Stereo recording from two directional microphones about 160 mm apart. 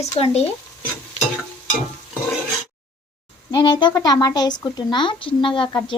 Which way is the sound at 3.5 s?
25° left (ahead or behind).